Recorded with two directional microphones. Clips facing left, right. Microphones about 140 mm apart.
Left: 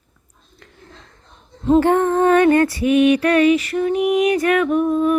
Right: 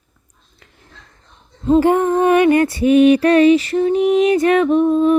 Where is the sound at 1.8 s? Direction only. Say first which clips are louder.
Right 1 dB; 10° right (ahead or behind).